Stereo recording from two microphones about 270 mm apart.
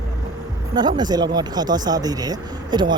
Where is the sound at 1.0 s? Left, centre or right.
Centre.